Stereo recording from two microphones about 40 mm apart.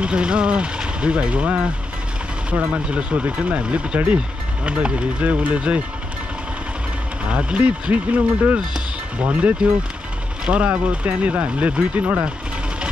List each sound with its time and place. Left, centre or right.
0.0 s speech: right
7.2 s speech: right